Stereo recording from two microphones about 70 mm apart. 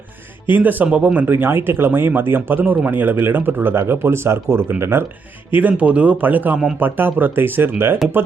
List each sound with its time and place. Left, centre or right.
0.5 s speech: right
5.5 s speech: right